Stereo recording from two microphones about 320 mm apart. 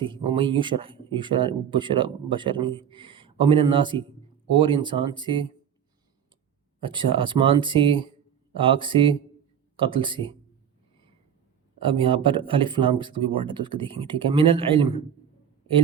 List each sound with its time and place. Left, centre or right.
0.0 s speech: centre
6.8 s speech: centre
11.8 s speech: centre